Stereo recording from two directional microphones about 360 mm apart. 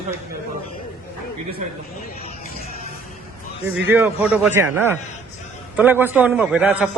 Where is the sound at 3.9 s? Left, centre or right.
Centre.